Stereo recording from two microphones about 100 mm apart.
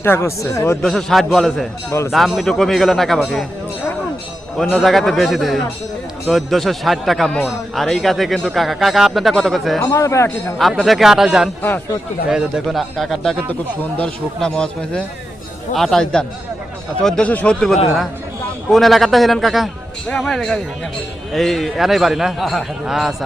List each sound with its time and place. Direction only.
0.0 s speech: 25° left (ahead or behind)
0.8 s speech: 5° left (ahead or behind)
1.9 s speech: 30° left (ahead or behind)
2.1 s speech: centre (ahead or behind)
4.5 s speech: centre (ahead or behind)
9.8 s speech: 30° left (ahead or behind)
10.6 s speech: centre (ahead or behind)
12.6 s speech: centre (ahead or behind)
13.5 s speech: 15° left (ahead or behind); by 23.1 s centre (ahead or behind)